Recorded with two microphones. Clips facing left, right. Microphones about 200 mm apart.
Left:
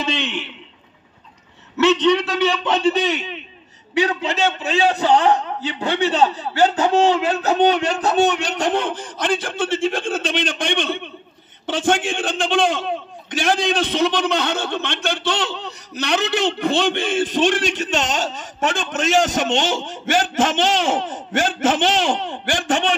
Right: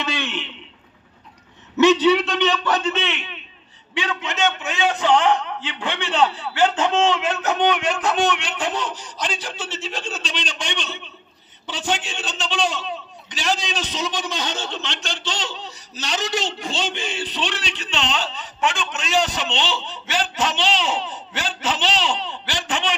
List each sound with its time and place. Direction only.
0.0 s a man's voice: 20° left (ahead or behind)
1.8 s a man's voice: 10° right (ahead or behind); by 2.7 s 10° left (ahead or behind)
2.7 s a man's voice: 35° left (ahead or behind); by 22.9 s 50° left (ahead or behind)